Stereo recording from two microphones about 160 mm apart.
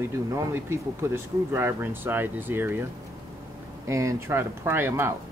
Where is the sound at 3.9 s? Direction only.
20° right (ahead or behind).